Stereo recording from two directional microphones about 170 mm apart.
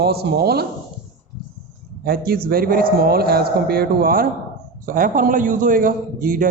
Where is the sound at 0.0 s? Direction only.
70° right (ahead or behind).